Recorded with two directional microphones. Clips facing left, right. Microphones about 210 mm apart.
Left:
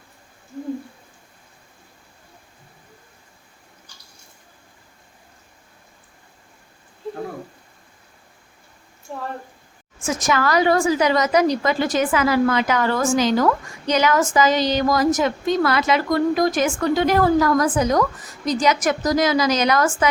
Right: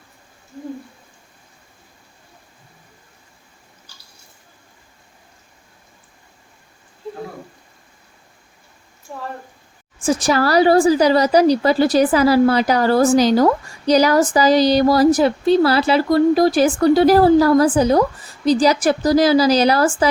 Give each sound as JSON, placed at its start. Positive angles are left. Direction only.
{"t": 10.0, "sound": "a woman's voice", "side_deg": -30}